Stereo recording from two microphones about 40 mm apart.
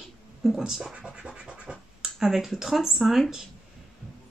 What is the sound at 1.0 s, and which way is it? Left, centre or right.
Scratch, right.